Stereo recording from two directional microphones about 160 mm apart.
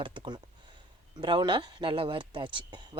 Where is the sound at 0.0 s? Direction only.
30° right (ahead or behind).